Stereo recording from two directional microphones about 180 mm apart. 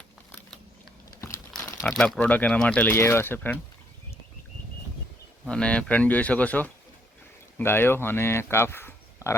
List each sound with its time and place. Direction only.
1.6 s crumpling: 15° left (ahead or behind)
1.9 s speech: 5° left (ahead or behind)
5.5 s speech: 5° left (ahead or behind)